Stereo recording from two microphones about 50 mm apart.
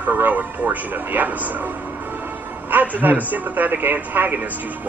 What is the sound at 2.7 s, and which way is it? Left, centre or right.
Speech, right.